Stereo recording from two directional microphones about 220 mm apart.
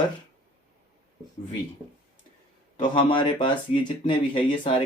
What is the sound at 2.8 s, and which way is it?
Speech, 20° left (ahead or behind).